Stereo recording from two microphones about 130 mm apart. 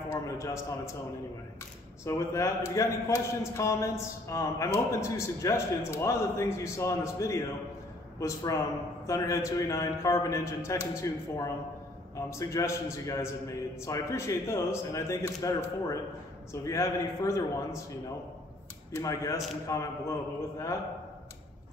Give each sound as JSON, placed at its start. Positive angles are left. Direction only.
{"t": 0.1, "sound": "a man's voice", "side_deg": 20}
{"t": 2.0, "sound": "a man's voice", "side_deg": 25}
{"t": 18.9, "sound": "a man's voice", "side_deg": 20}